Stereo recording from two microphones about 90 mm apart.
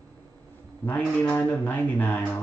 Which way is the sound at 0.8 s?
15° left (ahead or behind).